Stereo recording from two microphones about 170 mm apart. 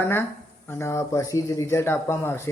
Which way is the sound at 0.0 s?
15° left (ahead or behind).